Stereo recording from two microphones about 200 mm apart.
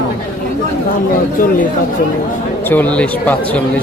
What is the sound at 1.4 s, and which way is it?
Speech, 45° left (ahead or behind).